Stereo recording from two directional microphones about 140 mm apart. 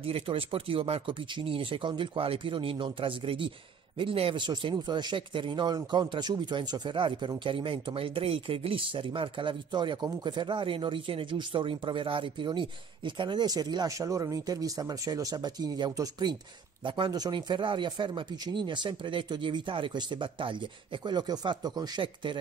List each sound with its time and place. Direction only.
0.0 s speech: 40° right (ahead or behind)